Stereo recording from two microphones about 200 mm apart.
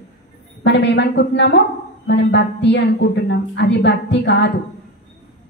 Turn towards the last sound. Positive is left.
turn(degrees=60)  # may be behind; listen again after turning